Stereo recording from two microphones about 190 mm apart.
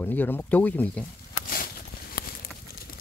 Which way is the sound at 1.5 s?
50° left (ahead or behind).